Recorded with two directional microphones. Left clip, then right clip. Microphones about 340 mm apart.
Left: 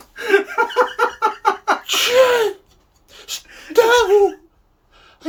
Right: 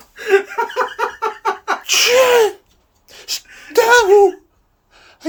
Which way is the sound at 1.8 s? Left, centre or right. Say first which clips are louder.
Right 3 dB; centre.